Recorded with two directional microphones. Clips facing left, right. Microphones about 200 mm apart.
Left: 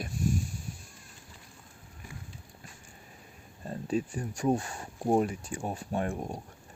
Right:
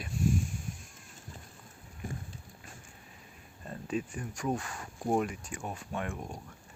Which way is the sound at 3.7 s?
35° left (ahead or behind).